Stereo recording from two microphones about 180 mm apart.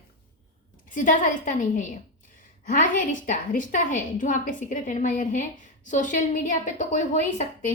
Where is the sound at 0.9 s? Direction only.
45° left (ahead or behind).